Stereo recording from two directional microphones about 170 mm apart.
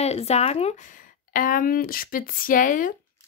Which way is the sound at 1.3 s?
55° left (ahead or behind).